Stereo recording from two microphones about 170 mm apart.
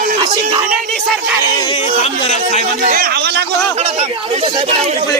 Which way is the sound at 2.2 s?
40° left (ahead or behind).